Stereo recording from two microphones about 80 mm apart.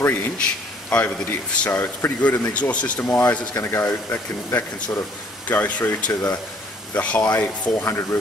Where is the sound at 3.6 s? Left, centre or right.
Left.